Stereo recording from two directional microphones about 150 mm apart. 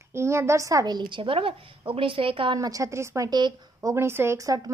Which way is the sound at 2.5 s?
25° right (ahead or behind).